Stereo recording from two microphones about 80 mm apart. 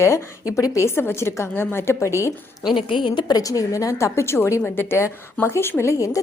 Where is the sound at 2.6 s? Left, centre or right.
Left.